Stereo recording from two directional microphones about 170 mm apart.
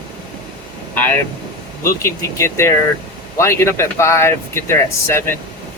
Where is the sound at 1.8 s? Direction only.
15° left (ahead or behind).